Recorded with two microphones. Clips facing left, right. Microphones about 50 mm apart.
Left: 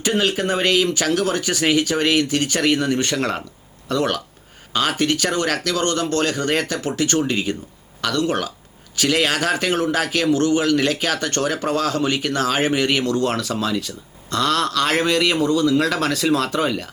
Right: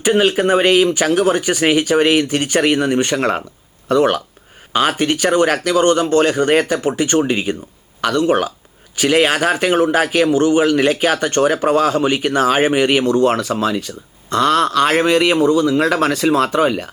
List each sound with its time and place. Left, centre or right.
0.0 s a man's voice: centre